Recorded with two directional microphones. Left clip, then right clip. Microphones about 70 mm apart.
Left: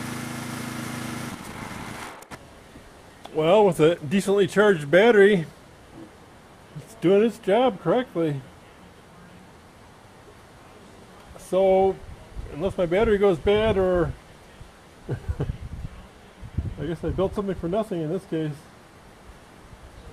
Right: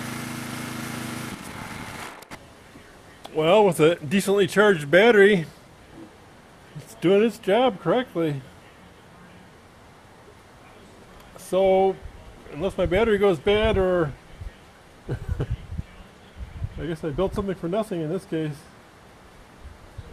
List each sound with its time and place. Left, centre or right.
3.2 s speech: right
7.0 s speech: right
11.3 s speech: right
16.8 s speech: right